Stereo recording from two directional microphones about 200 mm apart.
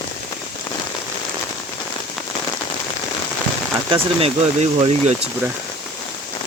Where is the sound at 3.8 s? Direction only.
25° right (ahead or behind).